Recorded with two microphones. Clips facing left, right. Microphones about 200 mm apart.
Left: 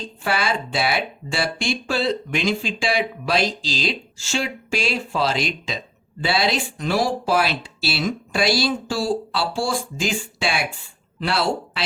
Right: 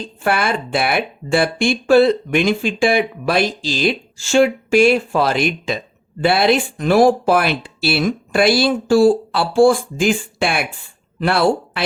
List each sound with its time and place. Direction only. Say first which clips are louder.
0.2 s speech: right 5 dB; 55° right (ahead or behind)